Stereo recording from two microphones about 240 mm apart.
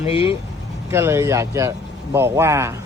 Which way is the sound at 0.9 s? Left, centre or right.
Centre.